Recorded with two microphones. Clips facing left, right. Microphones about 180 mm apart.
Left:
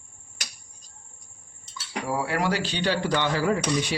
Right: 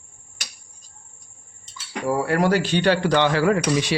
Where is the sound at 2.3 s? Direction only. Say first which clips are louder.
Right 6 dB; 50° right (ahead or behind); by 4.0 s 85° right.